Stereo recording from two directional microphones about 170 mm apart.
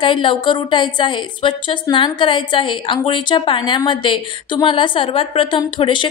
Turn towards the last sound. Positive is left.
turn(degrees=30)  # may be behind; listen again after turning